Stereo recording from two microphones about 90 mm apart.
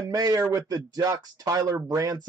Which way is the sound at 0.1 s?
40° right (ahead or behind).